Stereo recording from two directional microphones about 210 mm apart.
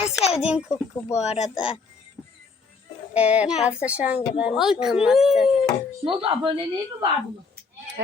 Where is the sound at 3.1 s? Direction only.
5° right (ahead or behind).